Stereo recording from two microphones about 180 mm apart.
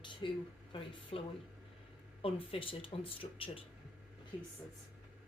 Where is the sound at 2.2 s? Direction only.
30° left (ahead or behind).